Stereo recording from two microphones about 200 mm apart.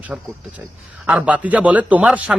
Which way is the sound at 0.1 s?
5° right (ahead or behind).